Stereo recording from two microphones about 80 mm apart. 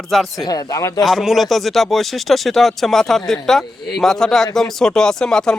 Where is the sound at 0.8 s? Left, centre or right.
Left.